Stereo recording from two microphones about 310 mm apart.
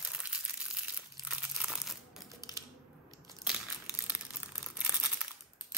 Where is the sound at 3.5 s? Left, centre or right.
Centre.